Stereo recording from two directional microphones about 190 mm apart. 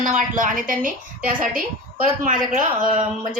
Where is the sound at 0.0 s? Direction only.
45° right (ahead or behind).